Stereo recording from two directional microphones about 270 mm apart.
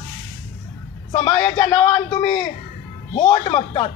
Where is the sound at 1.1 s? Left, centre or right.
Centre.